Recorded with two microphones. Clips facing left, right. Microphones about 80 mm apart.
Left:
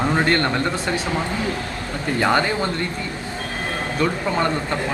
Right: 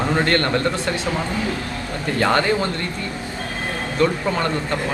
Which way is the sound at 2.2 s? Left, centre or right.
Centre.